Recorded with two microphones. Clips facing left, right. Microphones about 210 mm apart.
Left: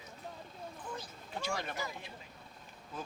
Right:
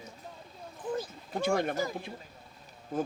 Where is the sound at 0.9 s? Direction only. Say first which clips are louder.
Right 9 dB; 50° right (ahead or behind).